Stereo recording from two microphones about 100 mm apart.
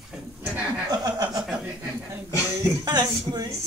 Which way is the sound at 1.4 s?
5° right (ahead or behind).